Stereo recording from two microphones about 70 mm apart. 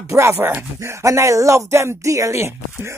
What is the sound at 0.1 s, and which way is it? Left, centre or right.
Speech, right.